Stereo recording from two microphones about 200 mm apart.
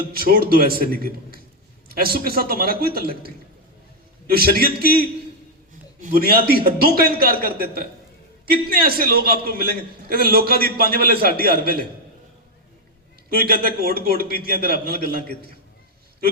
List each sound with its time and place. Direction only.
0.1 s a man's voice: 50° right (ahead or behind)
13.3 s a man's voice: 50° right (ahead or behind)